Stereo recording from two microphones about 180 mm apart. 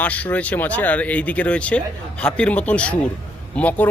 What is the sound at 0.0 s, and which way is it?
A man's voice, 10° left (ahead or behind).